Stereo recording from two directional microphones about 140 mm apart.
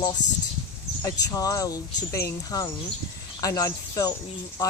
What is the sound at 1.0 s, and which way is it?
Speech, 25° left (ahead or behind).